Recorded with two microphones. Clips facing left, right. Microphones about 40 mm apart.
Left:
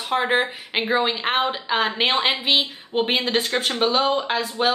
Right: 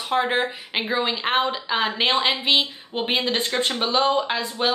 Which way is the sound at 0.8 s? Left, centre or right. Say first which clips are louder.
Left 2 dB; centre.